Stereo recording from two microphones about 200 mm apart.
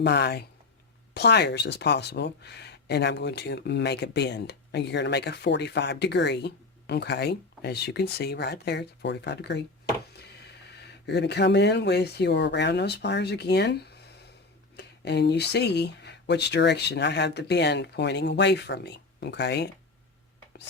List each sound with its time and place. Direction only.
0.0 s speech: 55° left (ahead or behind)
11.0 s speech: 55° left (ahead or behind)
14.8 s speech: 55° left (ahead or behind)